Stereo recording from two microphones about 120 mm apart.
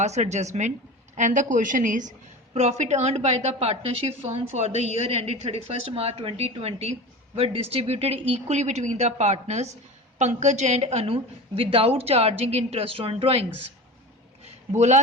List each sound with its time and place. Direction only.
0.0 s a woman's voice: 70° right (ahead or behind)
1.1 s a woman's voice: 90° right; by 13.4 s 50° right (ahead or behind)
14.8 s a woman's voice: 75° right (ahead or behind)